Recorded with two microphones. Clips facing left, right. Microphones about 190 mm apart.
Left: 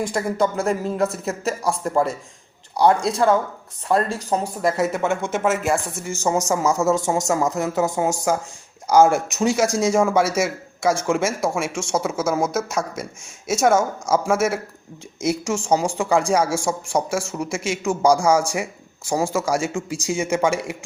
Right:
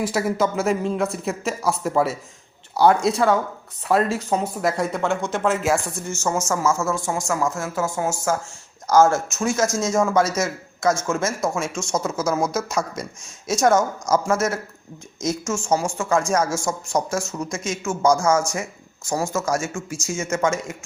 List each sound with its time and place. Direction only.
0.0 s speech: 5° right (ahead or behind)
6.5 s speech: 15° left (ahead or behind)